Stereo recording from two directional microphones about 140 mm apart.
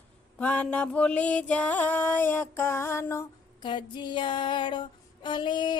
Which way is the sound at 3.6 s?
35° left (ahead or behind).